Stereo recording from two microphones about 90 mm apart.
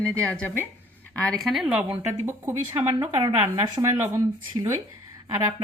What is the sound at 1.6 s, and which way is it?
Speech, 15° right (ahead or behind).